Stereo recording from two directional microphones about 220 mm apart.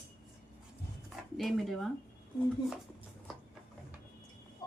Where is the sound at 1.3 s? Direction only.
Centre (ahead or behind).